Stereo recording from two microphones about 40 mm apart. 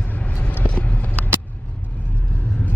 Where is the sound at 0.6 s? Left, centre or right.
Left.